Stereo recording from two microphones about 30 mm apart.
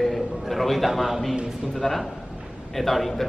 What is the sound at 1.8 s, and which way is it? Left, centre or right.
Speech, centre.